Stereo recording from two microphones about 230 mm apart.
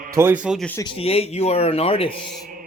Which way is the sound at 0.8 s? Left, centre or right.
Left.